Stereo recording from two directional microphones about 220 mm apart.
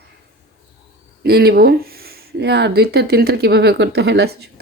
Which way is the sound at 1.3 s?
45° right (ahead or behind).